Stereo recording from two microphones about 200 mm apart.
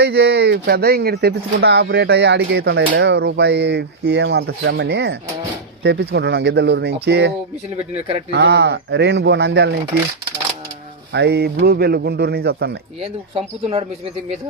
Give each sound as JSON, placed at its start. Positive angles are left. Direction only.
{"t": 0.0, "sound": "speech", "side_deg": -55}
{"t": 11.1, "sound": "speech", "side_deg": -55}
{"t": 13.0, "sound": "speech", "side_deg": -30}